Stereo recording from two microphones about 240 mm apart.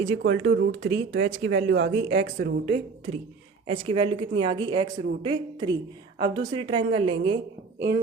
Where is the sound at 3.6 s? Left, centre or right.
Right.